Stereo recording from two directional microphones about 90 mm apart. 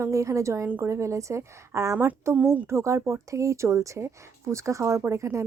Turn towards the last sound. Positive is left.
turn(degrees=-35)  # may be behind; listen again after turning